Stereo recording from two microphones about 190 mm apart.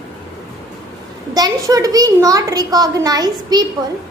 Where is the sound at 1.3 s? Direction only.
20° right (ahead or behind).